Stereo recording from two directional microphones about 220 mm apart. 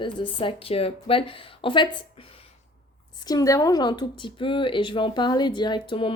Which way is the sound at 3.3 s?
15° left (ahead or behind).